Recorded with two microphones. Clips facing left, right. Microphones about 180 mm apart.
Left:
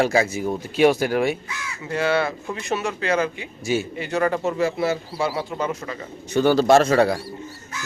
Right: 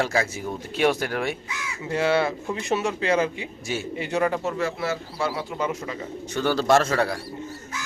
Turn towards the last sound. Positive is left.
turn(degrees=20)  # may be behind; listen again after turning